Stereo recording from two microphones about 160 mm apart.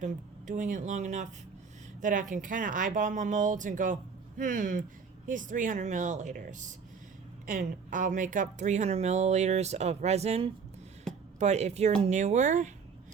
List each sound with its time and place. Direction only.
0.0 s speech: 50° right (ahead or behind)